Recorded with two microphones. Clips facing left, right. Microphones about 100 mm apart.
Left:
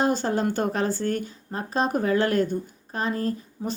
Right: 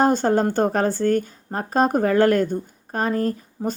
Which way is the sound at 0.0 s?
45° right (ahead or behind).